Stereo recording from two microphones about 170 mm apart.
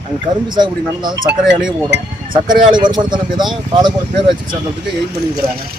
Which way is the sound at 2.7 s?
25° right (ahead or behind).